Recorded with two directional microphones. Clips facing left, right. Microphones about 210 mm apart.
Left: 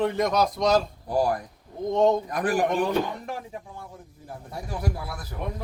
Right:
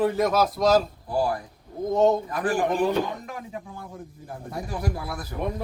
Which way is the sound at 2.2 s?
40° left (ahead or behind).